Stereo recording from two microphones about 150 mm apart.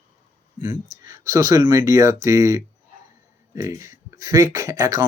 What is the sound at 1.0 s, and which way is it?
Speech, 20° right (ahead or behind).